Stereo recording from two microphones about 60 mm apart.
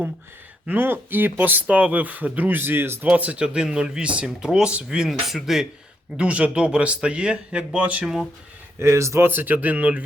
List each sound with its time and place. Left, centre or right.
0.7 s speech: right
3.1 s speech: right
5.0 s speech: centre
6.1 s speech: centre
8.0 s speech: centre
8.8 s speech: right
9.2 s speech: right